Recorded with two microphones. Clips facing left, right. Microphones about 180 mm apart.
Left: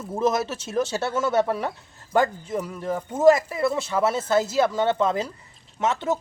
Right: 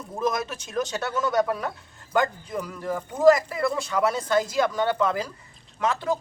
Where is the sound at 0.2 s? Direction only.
25° left (ahead or behind).